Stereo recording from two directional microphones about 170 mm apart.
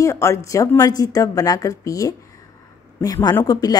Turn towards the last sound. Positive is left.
turn(degrees=25)  # may be behind; listen again after turning